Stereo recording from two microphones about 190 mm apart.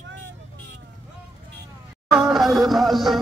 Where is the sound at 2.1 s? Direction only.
5° right (ahead or behind).